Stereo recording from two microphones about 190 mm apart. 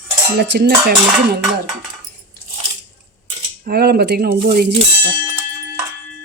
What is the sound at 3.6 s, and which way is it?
Speech, 55° right (ahead or behind).